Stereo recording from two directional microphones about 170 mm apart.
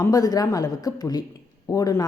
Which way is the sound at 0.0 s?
20° left (ahead or behind).